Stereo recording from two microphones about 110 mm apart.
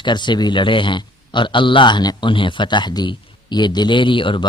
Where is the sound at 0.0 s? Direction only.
45° left (ahead or behind).